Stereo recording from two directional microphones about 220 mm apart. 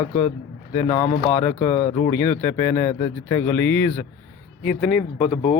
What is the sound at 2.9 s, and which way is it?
Speech, 25° left (ahead or behind).